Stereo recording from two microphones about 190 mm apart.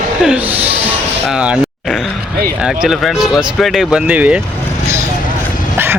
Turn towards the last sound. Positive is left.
turn(degrees=-10)  # may be behind; listen again after turning